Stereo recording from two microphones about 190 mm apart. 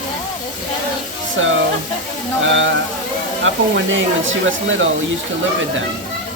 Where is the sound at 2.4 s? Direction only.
85° right.